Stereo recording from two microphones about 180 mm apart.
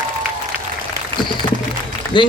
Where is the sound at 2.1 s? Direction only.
25° left (ahead or behind).